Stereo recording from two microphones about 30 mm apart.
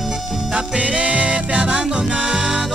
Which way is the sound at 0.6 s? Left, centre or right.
Right.